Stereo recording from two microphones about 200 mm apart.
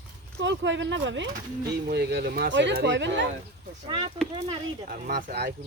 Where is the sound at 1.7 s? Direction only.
55° right (ahead or behind).